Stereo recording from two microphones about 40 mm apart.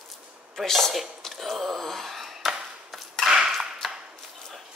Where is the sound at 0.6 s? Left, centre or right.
Centre.